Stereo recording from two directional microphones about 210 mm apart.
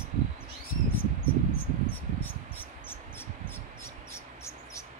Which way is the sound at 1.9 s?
10° left (ahead or behind).